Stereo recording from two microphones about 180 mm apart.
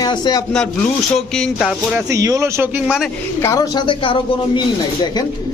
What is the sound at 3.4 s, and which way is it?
Speech, 20° left (ahead or behind).